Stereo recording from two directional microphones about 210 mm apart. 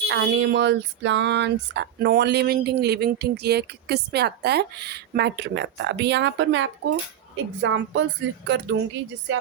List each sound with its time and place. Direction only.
0.1 s speech: 60° right (ahead or behind)